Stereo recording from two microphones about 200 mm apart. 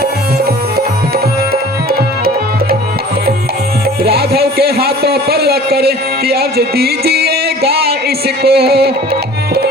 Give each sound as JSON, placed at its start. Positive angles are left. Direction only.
{"t": 1.9, "sound": "music", "side_deg": -50}
{"t": 4.0, "sound": "music", "side_deg": -50}